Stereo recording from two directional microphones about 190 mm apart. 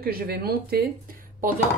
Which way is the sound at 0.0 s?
55° right (ahead or behind).